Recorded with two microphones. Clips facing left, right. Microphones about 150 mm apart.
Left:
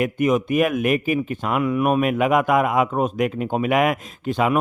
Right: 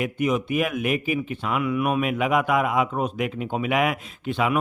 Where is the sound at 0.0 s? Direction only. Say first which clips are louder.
Left 4 dB; 50° left (ahead or behind).